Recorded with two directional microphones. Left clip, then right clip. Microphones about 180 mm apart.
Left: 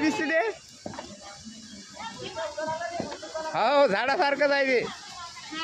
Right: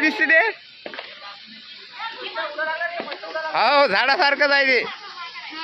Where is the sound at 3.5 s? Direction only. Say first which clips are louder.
Right 5 dB; 5° left (ahead or behind).